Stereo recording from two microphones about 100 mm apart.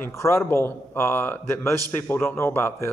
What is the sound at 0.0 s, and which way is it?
Speech, 25° left (ahead or behind).